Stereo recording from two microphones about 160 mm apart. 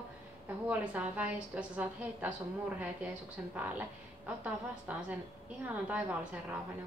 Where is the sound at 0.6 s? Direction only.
10° right (ahead or behind).